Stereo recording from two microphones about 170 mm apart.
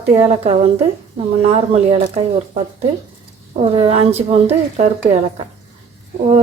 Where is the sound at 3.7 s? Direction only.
35° right (ahead or behind).